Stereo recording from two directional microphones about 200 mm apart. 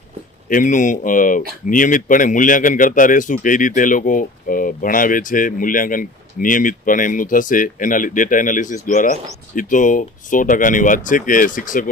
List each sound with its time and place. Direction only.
0.4 s speech: 40° left (ahead or behind)